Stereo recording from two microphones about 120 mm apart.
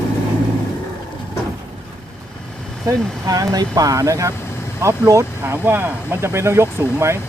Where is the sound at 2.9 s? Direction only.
30° right (ahead or behind).